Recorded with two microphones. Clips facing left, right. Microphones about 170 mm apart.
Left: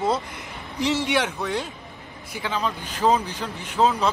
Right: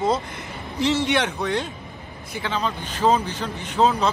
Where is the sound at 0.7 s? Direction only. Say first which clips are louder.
Right 2 dB; 10° left (ahead or behind).